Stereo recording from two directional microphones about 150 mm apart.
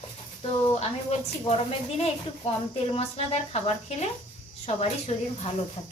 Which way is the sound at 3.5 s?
45° left (ahead or behind).